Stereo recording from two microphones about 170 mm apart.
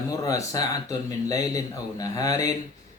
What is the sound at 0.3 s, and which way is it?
Speech, 20° left (ahead or behind).